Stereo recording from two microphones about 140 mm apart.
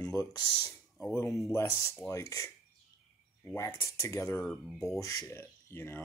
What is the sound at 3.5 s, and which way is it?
Speech, 20° left (ahead or behind).